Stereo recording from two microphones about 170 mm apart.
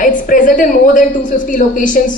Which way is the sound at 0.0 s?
50° left (ahead or behind).